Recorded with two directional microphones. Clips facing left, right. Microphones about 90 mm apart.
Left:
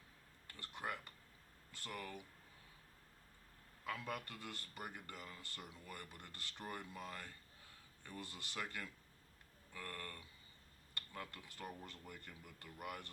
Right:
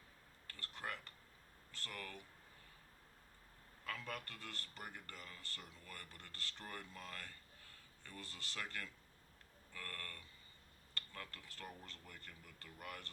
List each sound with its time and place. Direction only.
0.4 s a sound: 15° left (ahead or behind)
1.7 s speech: 15° left (ahead or behind)
3.8 s a man's voice: 15° left (ahead or behind)